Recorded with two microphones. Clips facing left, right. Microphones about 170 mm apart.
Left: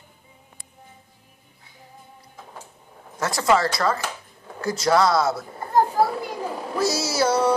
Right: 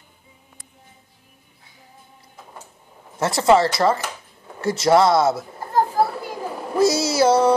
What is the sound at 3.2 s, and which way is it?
Speech, 25° right (ahead or behind).